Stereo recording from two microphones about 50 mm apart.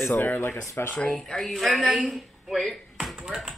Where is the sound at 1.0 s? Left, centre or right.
Centre.